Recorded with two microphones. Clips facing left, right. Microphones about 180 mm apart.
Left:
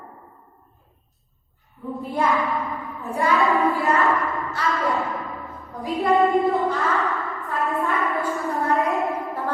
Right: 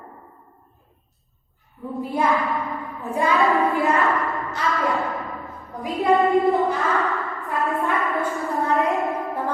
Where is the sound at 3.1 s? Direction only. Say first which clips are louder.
Right 1 dB; 15° right (ahead or behind).